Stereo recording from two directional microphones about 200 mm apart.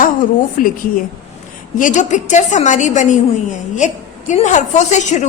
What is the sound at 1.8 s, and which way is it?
A woman's voice, 40° left (ahead or behind).